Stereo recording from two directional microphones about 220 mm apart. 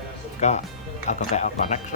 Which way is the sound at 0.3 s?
30° left (ahead or behind).